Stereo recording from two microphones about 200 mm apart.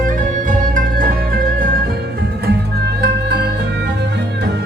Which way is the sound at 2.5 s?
55° right (ahead or behind).